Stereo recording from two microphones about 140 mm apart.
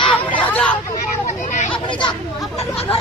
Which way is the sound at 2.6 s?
45° left (ahead or behind).